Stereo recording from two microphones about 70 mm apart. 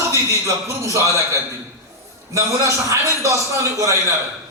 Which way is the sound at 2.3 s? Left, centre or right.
Right.